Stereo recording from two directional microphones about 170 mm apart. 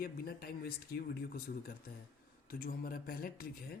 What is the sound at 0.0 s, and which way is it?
Speech, 60° left (ahead or behind).